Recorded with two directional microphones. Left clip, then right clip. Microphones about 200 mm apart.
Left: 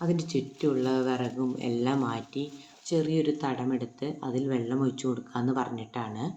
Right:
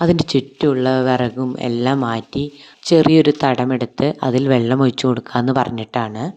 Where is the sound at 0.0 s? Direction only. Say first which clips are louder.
Right 14 dB; 50° right (ahead or behind).